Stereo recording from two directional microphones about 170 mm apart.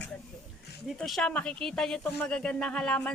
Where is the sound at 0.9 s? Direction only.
Centre (ahead or behind).